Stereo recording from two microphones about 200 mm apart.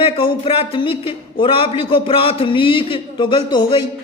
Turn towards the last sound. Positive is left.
turn(degrees=25)  # may be behind; listen again after turning